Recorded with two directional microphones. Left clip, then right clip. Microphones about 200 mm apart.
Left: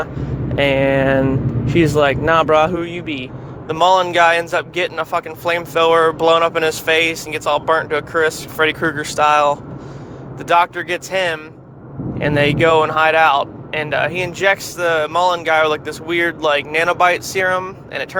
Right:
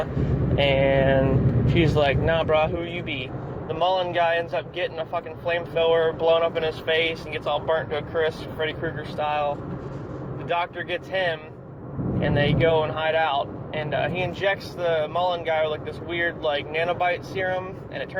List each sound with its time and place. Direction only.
0.5 s speech: 45° left (ahead or behind)
3.7 s speech: 55° left (ahead or behind)